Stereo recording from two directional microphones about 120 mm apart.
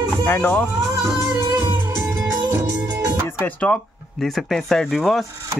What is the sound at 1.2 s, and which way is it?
Music, 25° right (ahead or behind).